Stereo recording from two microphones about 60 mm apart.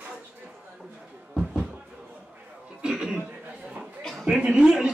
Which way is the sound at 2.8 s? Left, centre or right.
Centre.